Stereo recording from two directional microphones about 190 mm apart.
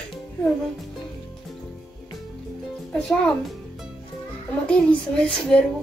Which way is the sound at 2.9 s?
5° left (ahead or behind).